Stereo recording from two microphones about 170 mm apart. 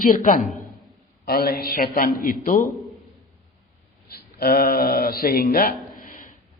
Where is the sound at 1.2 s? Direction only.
65° left (ahead or behind).